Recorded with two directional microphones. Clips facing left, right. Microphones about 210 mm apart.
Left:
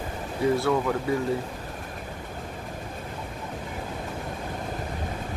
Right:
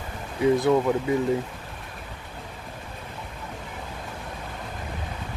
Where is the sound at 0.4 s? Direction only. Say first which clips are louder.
Right 3 dB; 15° right (ahead or behind).